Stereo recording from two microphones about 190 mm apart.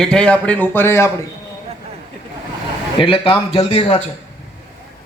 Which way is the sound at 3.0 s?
30° left (ahead or behind).